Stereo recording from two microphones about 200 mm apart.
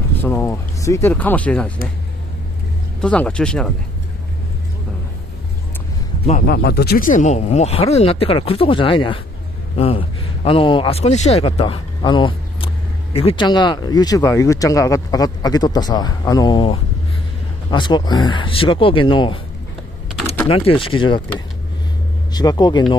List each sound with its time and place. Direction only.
0.1 s a sound: 10° left (ahead or behind)
3.0 s speech: 5° left (ahead or behind)
6.4 s a man's voice: 55° left (ahead or behind); by 19.4 s 25° left (ahead or behind)
20.4 s a man's voice: 25° left (ahead or behind)
22.3 s a man's voice: 20° left (ahead or behind)